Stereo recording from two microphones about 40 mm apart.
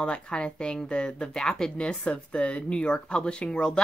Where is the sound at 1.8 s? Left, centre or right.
Left.